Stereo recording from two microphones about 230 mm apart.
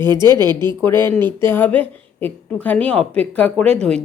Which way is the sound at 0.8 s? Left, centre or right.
Centre.